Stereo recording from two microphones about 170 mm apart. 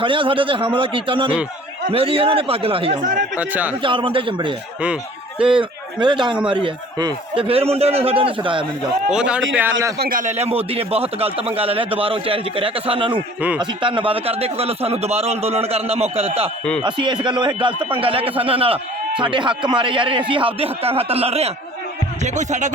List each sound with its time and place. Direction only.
0.0 s a man's voice: 30° right (ahead or behind)
3.0 s speech: 50° right (ahead or behind)
3.3 s a man's voice: 10° right (ahead or behind)
3.8 s a man's voice: 30° right (ahead or behind)
5.5 s a man's voice: 30° right (ahead or behind)
9.0 s a man's voice: 5° right (ahead or behind)
10.0 s a man's voice: 55° right (ahead or behind)